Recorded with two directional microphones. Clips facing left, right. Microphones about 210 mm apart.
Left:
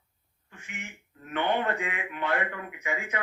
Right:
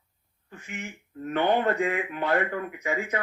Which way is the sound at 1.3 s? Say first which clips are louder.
Right 4 dB; 35° right (ahead or behind).